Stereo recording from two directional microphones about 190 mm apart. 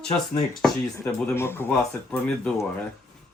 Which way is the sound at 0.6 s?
5° left (ahead or behind).